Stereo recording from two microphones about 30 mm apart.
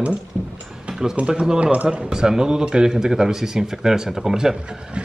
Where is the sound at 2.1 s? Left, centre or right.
Right.